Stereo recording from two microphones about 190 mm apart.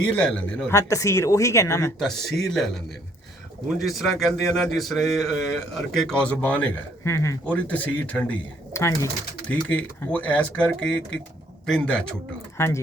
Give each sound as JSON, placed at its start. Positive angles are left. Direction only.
{"t": 0.0, "sound": "speech", "side_deg": 5}
{"t": 0.7, "sound": "a man's voice", "side_deg": 15}
{"t": 2.0, "sound": "speech", "side_deg": 0}
{"t": 3.8, "sound": "a man's voice", "side_deg": 0}